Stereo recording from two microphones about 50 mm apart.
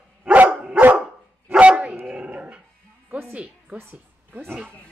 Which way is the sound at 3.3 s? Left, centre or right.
Right.